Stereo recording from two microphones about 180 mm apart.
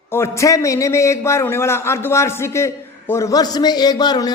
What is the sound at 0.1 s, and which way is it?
A man's voice, 15° left (ahead or behind).